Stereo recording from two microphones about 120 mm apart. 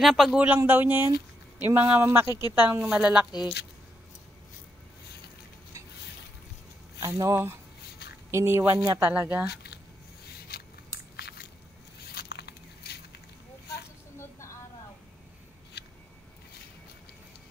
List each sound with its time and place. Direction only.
0.0 s speech: 5° right (ahead or behind)
0.6 s speech: 15° right (ahead or behind)
2.8 s speech: 5° right (ahead or behind)
7.0 s speech: 25° right (ahead or behind)